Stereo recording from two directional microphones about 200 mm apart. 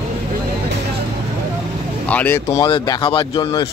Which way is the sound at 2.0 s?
10° left (ahead or behind).